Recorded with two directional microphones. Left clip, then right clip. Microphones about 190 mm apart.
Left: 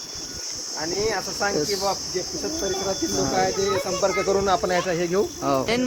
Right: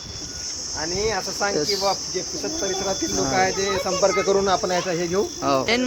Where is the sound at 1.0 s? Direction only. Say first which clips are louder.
Right 1 dB; 5° right (ahead or behind).